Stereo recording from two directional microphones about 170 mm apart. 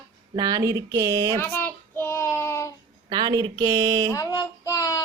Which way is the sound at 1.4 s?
10° left (ahead or behind).